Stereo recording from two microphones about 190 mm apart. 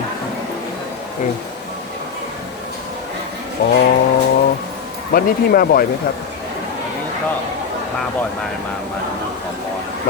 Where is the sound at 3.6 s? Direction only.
50° left (ahead or behind).